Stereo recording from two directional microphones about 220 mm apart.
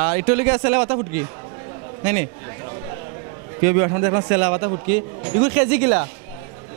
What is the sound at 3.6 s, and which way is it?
A man's voice, 15° right (ahead or behind).